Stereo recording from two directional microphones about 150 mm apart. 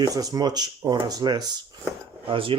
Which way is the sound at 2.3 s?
35° right (ahead or behind).